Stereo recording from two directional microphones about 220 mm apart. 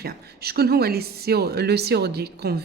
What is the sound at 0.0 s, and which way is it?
A woman's voice, 45° right (ahead or behind).